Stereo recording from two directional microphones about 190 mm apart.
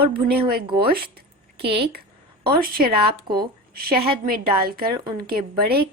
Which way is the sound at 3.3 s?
55° right (ahead or behind).